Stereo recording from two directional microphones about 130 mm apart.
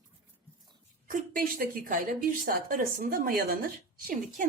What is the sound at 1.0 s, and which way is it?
A woman's voice, 90° right.